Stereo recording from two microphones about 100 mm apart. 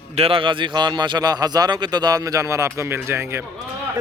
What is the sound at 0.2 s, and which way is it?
A man's voice, 60° right (ahead or behind).